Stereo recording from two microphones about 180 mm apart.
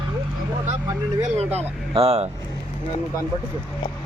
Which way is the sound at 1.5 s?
30° right (ahead or behind).